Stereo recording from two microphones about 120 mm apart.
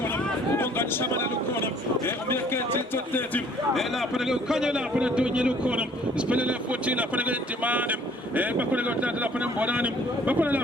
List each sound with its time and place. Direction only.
0.5 s speech: 20° left (ahead or behind)
3.8 s a man's voice: centre (ahead or behind)